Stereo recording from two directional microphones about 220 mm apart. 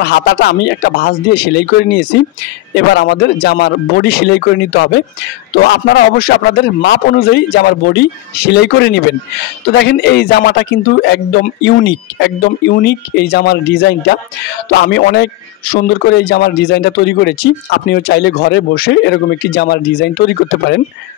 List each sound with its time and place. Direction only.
0.0 s a man's voice: 50° left (ahead or behind)